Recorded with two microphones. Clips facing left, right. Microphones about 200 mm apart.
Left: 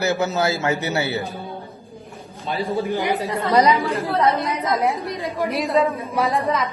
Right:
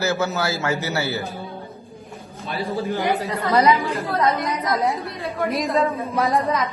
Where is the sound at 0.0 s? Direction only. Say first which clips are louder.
Left 2 dB; 15° left (ahead or behind).